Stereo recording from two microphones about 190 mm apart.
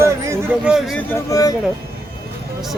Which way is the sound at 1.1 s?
15° left (ahead or behind).